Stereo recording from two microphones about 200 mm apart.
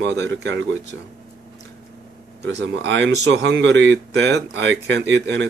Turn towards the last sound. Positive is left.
turn(degrees=-65)  # may be behind; listen again after turning